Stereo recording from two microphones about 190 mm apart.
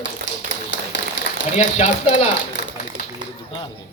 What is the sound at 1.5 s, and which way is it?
Speech, 40° left (ahead or behind).